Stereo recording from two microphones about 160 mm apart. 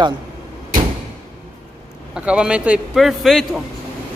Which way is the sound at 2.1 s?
5° right (ahead or behind).